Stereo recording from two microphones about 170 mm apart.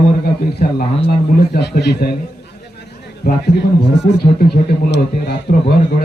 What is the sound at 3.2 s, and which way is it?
Speech, 85° left.